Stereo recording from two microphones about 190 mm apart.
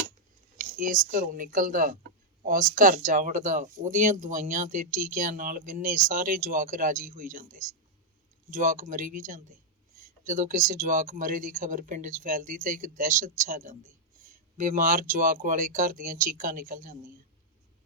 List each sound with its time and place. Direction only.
0.6 s speech: 45° right (ahead or behind)